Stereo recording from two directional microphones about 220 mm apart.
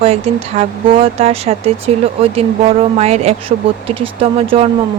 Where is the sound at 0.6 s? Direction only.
25° right (ahead or behind).